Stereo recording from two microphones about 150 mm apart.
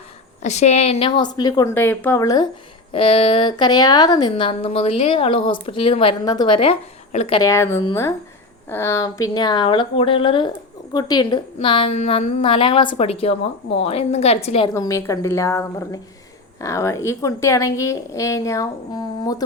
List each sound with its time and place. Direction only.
0.4 s a woman's voice: 50° left (ahead or behind); by 1.7 s 25° left (ahead or behind)
1.7 s speech: 15° left (ahead or behind)
2.9 s a woman's voice: 40° left (ahead or behind)
7.3 s a woman's voice: 20° left (ahead or behind); by 14.7 s 40° left (ahead or behind)
14.7 s speech: 20° left (ahead or behind)